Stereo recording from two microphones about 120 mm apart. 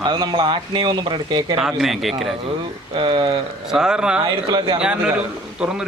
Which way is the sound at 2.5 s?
45° right (ahead or behind).